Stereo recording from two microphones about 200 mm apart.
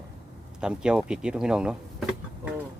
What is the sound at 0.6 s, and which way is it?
Speech, 5° right (ahead or behind).